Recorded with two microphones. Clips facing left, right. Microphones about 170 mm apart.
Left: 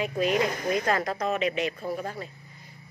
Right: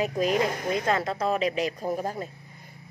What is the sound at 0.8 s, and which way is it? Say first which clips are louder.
Speech: right 1 dB; 25° right (ahead or behind).